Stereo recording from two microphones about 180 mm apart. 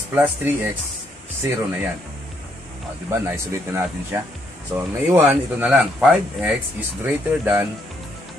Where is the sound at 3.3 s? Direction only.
10° right (ahead or behind).